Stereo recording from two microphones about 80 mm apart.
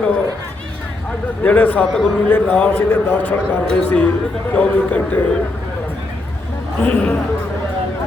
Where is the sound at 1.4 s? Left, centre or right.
Left.